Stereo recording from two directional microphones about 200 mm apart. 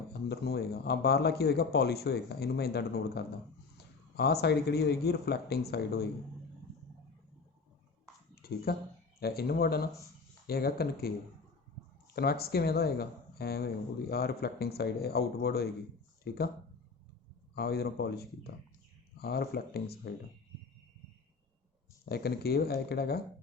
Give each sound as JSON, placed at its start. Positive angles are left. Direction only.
{"t": 0.1, "sound": "speech", "side_deg": 55}
{"t": 8.4, "sound": "a sound", "side_deg": 50}
{"t": 9.2, "sound": "speech", "side_deg": 50}
{"t": 12.1, "sound": "speech", "side_deg": 50}
{"t": 17.5, "sound": "speech", "side_deg": 50}
{"t": 22.1, "sound": "speech", "side_deg": 50}